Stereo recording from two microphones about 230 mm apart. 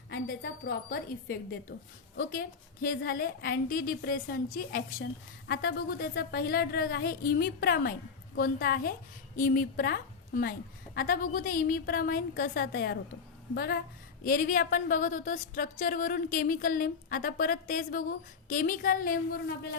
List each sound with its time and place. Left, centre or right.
0.1 s a woman's voice: left